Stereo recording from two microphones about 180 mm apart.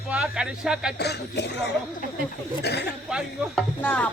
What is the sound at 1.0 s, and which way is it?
Speech, 65° left (ahead or behind).